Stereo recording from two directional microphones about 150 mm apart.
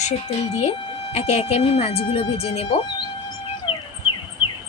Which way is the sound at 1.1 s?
45° left (ahead or behind).